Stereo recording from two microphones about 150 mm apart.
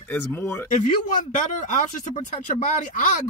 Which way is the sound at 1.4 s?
55° left (ahead or behind).